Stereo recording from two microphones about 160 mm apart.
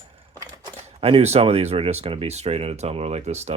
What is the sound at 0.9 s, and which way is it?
Speech, 40° right (ahead or behind).